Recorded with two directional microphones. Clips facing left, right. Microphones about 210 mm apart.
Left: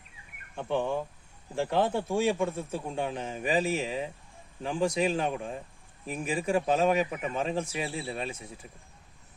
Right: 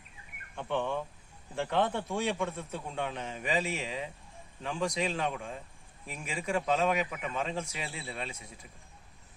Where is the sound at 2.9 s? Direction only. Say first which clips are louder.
Left 2 dB; 30° left (ahead or behind).